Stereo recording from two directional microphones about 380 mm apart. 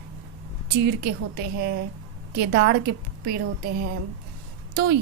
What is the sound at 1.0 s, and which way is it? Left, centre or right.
A woman's voice, right.